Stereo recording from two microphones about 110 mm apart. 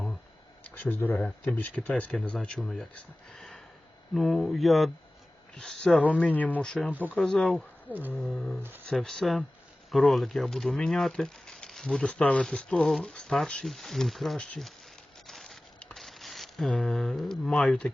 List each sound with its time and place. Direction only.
0.7 s speech: 15° left (ahead or behind)
6.9 s speech: 15° right (ahead or behind)
7.2 s speech: 5° left (ahead or behind)
7.9 s speech: 15° right (ahead or behind)
8.2 s speech: 5° left (ahead or behind)
15.3 s a sound: 5° left (ahead or behind)